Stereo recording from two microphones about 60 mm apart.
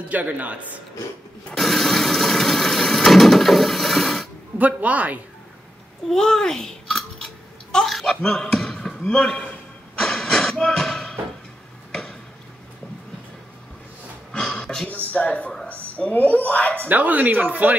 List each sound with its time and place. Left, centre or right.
0.1 s speech: right
1.5 s a sound: centre
4.6 s speech: right
6.0 s a child's voice: centre
7.7 s basketball bounce: centre
9.9 s a sound: centre
14.3 s a sound: centre
15.1 s a woman's voice: left
16.7 s speech: right